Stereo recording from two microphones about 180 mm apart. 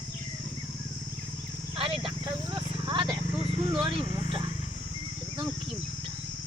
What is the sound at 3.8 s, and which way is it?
Speech, 30° right (ahead or behind).